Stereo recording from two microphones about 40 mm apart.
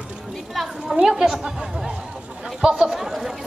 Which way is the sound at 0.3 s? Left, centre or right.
Centre.